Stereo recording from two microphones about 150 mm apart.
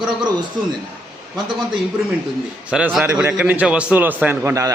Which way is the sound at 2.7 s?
5° right (ahead or behind).